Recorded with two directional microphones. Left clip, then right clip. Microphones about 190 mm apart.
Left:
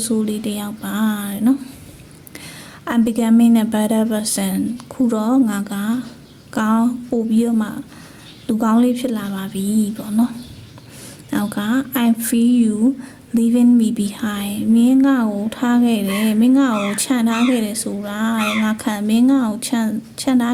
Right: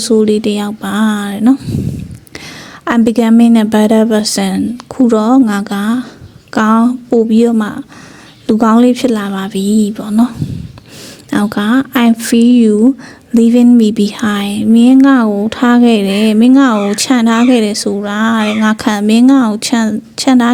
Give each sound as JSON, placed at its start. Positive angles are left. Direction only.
{"t": 0.0, "sound": "speech", "side_deg": -30}
{"t": 2.8, "sound": "speech", "side_deg": -35}